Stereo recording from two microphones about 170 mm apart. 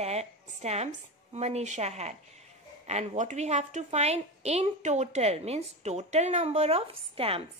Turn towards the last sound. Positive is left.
turn(degrees=-35)  # may be behind; listen again after turning